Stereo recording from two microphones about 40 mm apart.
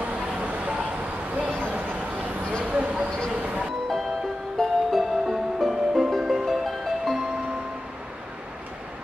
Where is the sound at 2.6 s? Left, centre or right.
Right.